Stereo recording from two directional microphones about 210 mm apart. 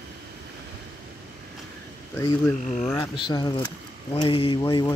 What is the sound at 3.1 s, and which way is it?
Speech, 20° left (ahead or behind).